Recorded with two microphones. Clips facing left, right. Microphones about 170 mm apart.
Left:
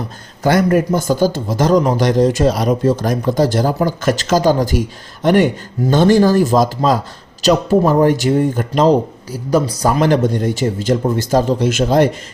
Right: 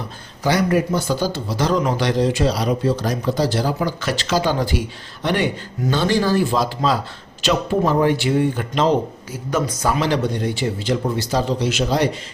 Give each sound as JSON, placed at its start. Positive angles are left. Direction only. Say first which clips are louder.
{"t": 0.4, "sound": "speech", "louder": "left 5 dB", "side_deg": 50}